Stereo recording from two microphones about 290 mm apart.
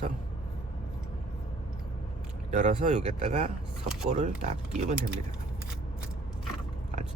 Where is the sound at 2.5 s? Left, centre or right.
Right.